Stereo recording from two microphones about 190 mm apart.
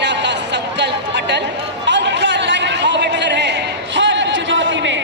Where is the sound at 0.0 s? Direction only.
65° right (ahead or behind).